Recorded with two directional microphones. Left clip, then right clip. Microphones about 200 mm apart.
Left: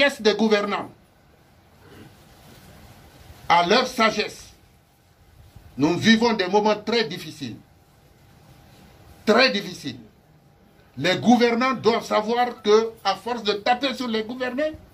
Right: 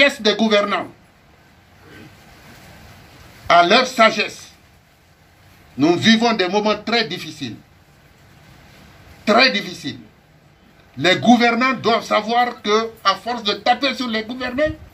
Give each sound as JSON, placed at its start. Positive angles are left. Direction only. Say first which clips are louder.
{"t": 0.0, "sound": "speech", "louder": "right 4 dB", "side_deg": -40}
{"t": 3.4, "sound": "speech", "louder": "right 5 dB", "side_deg": -40}
{"t": 5.8, "sound": "speech", "louder": "right 4 dB", "side_deg": -40}
{"t": 9.2, "sound": "speech", "louder": "right 4 dB", "side_deg": -40}
{"t": 11.0, "sound": "speech", "louder": "right 5 dB", "side_deg": -40}